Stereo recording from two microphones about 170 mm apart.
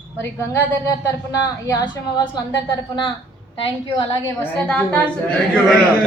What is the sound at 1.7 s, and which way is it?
A woman's voice, 25° left (ahead or behind).